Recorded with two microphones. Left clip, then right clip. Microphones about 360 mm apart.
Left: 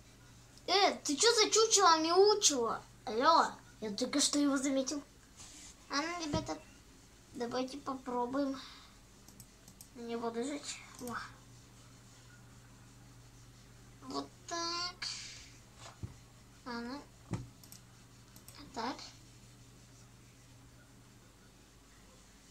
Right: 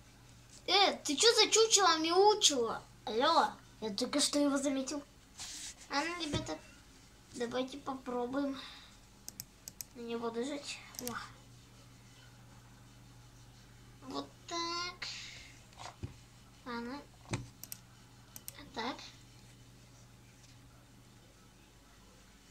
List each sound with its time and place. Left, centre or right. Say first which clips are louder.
0.7 s a child's voice: right 1 dB; centre
10.0 s a woman's voice: even; centre
14.0 s child singing: left 1 dB; centre
16.6 s speech: right 1 dB; centre
17.3 s computer keyboard: right 4 dB; right
18.8 s a woman's voice: even; centre